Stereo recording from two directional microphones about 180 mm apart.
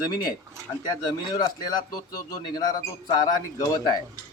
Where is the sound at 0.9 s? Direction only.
20° left (ahead or behind).